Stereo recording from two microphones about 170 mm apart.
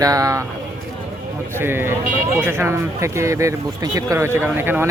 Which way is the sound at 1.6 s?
15° right (ahead or behind).